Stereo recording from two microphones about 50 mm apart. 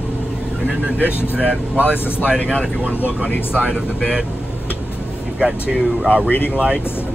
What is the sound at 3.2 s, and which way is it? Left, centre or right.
Speech, centre.